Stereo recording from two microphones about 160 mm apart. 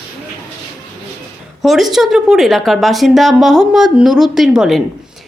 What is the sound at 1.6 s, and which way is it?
A woman's voice, centre (ahead or behind).